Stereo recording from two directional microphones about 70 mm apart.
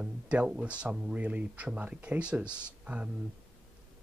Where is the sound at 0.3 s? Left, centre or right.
Centre.